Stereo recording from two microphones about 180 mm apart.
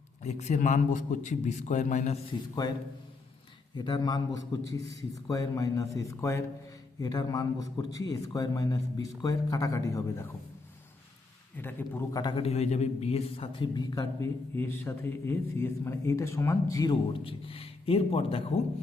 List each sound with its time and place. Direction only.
0.2 s a man's voice: 40° left (ahead or behind)
2.6 s a man's voice: 20° left (ahead or behind)
3.8 s a man's voice: 25° left (ahead or behind)
5.3 s a man's voice: 20° left (ahead or behind)
11.5 s a man's voice: 10° left (ahead or behind)
12.2 s a man's voice: 30° left (ahead or behind)